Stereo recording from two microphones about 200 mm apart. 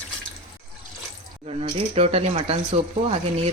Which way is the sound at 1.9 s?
30° right (ahead or behind).